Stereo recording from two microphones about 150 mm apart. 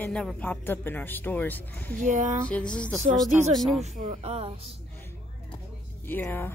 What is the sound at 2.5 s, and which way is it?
Speech, 5° left (ahead or behind).